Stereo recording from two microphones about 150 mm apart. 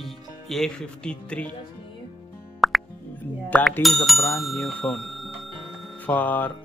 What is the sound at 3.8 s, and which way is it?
Speech, centre (ahead or behind).